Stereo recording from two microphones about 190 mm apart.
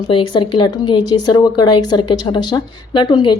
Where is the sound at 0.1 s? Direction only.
25° left (ahead or behind).